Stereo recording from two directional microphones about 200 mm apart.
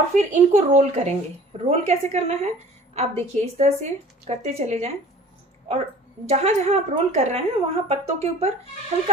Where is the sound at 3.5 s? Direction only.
35° right (ahead or behind).